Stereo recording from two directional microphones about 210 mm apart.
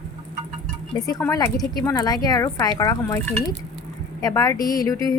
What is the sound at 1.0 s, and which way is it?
Speech, 15° left (ahead or behind).